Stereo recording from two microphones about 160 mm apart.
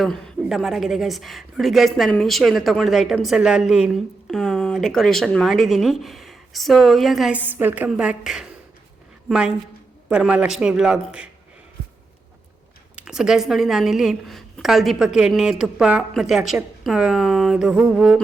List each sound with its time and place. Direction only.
0.0 s speech: centre (ahead or behind)
10.1 s speech: 5° right (ahead or behind)
13.0 s speech: 5° right (ahead or behind)